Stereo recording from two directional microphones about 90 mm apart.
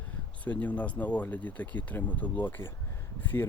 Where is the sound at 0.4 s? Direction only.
15° left (ahead or behind).